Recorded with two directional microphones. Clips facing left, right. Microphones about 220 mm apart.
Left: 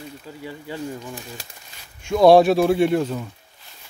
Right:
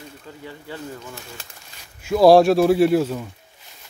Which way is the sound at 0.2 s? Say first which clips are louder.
Left 3 dB; 10° left (ahead or behind).